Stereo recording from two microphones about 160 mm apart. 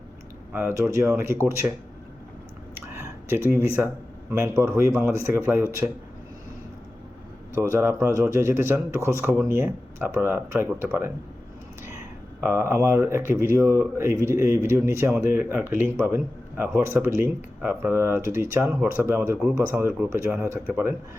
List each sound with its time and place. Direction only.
0.5 s speech: 15° right (ahead or behind)
2.7 s a sound: 15° right (ahead or behind)
4.3 s speech: 15° right (ahead or behind)
7.5 s speech: 15° right (ahead or behind)
12.4 s speech: 15° right (ahead or behind)